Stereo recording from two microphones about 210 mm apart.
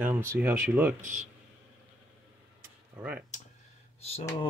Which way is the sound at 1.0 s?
35° right (ahead or behind).